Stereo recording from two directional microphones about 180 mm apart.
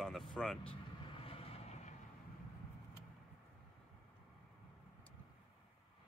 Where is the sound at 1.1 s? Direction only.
30° left (ahead or behind).